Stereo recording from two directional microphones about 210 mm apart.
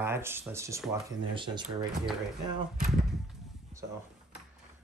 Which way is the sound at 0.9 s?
25° right (ahead or behind).